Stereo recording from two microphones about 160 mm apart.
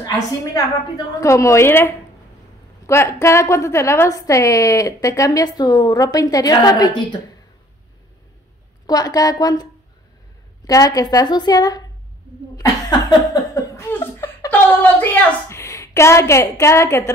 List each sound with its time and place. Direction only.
0.0 s a woman's voice: 20° left (ahead or behind)
8.8 s a woman's voice: 25° left (ahead or behind)
13.3 s chuckle: 20° left (ahead or behind)
15.5 s a woman's voice: 20° left (ahead or behind)